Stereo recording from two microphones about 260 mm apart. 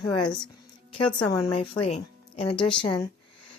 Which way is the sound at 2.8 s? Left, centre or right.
Centre.